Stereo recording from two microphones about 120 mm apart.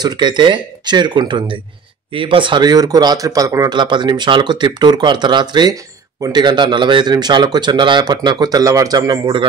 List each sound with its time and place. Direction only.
0.0 s speech: 35° right (ahead or behind)